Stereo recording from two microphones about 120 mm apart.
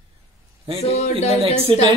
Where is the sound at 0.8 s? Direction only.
55° left (ahead or behind).